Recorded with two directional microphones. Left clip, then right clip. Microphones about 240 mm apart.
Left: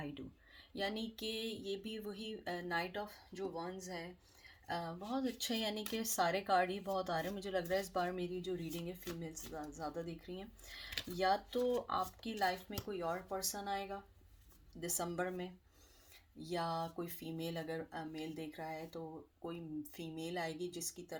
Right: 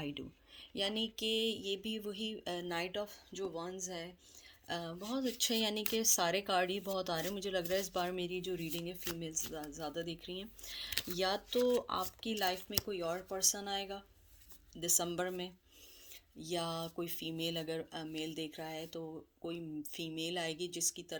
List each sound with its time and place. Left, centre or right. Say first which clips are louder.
0.7 s speech: right 4 dB; right
14.8 s speech: right 4 dB; right